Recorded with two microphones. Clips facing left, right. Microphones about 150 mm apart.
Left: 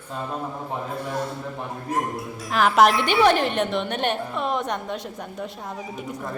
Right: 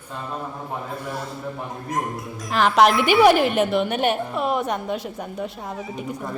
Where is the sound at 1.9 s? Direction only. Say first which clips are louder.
Left 1 dB; 5° left (ahead or behind).